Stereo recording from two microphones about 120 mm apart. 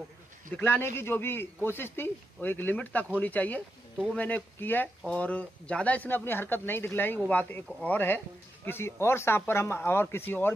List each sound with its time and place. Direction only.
0.5 s speech: 20° left (ahead or behind)